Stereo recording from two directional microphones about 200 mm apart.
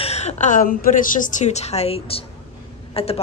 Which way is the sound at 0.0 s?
35° left (ahead or behind).